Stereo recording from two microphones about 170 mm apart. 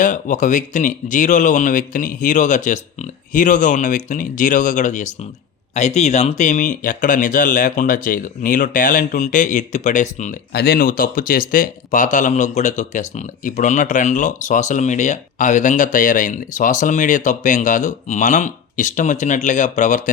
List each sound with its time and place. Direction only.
0.0 s speech: 50° left (ahead or behind)
10.5 s speech: 65° left (ahead or behind); by 20.1 s 45° left (ahead or behind)